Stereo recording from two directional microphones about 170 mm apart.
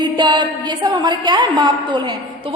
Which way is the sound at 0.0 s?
25° right (ahead or behind).